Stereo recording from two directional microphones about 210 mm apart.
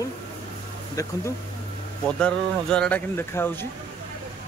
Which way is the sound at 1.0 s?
15° left (ahead or behind).